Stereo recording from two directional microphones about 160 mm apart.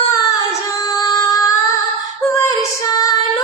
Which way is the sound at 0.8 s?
20° left (ahead or behind).